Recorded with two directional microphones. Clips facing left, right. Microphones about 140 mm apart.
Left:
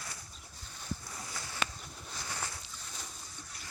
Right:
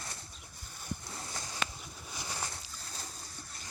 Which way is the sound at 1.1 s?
30° right (ahead or behind).